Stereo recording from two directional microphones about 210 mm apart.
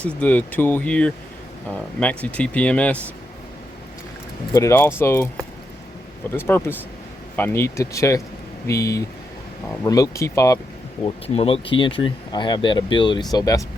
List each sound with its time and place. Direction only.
0.1 s speech: 5° left (ahead or behind)
4.5 s speech: 15° left (ahead or behind)
6.3 s speech: 10° left (ahead or behind)
11.0 s speech: 25° left (ahead or behind)